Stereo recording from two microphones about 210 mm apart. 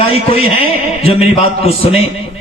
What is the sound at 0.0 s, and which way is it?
A man's voice, 30° left (ahead or behind).